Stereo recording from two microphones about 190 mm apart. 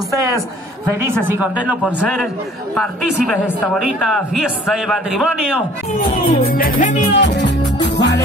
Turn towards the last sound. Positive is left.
turn(degrees=35)  # may be behind; listen again after turning